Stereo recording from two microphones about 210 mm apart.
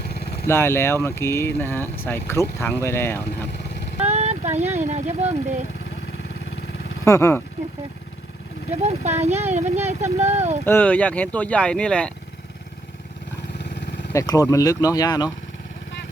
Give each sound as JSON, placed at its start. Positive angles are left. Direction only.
{"t": 0.0, "sound": "vehicle", "side_deg": 50}
{"t": 0.4, "sound": "speech", "side_deg": 10}
{"t": 4.0, "sound": "speech", "side_deg": -30}
{"t": 7.0, "sound": "speech", "side_deg": 15}
{"t": 8.8, "sound": "speech", "side_deg": -30}
{"t": 10.7, "sound": "speech", "side_deg": 10}
{"t": 13.6, "sound": "vehicle", "side_deg": 55}
{"t": 14.1, "sound": "speech", "side_deg": 15}